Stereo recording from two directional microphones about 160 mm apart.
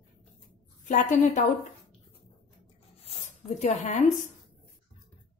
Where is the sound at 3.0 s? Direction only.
45° left (ahead or behind).